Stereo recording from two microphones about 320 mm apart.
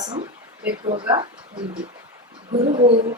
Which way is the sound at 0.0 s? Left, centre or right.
Centre.